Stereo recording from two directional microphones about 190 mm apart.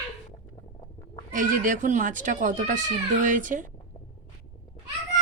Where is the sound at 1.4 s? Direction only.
45° right (ahead or behind).